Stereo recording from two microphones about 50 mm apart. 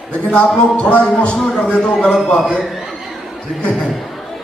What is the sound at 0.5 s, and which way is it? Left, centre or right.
Speech, centre.